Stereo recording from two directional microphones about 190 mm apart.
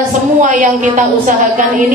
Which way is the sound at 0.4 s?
40° right (ahead or behind).